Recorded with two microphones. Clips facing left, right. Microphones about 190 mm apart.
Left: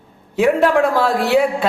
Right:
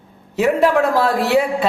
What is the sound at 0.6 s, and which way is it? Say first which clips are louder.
Speech: even; centre (ahead or behind).